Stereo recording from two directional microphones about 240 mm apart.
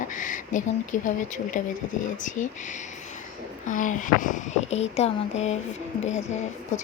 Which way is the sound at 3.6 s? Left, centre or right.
Left.